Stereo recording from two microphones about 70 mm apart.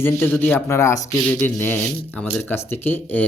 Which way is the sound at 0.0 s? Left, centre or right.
Left.